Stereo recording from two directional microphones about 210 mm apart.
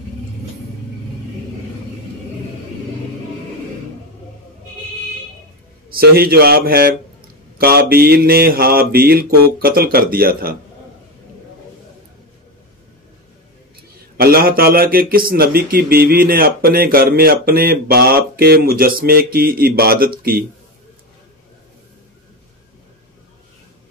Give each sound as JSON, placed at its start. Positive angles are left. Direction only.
{"t": 5.9, "sound": "a man's voice", "side_deg": -45}
{"t": 14.1, "sound": "a man's voice", "side_deg": -45}